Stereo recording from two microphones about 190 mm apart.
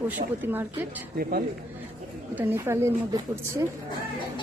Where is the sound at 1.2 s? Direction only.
50° right (ahead or behind).